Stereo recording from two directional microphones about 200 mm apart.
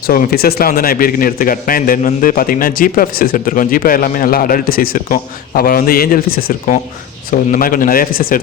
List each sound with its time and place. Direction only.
0.1 s a man's voice: 50° left (ahead or behind)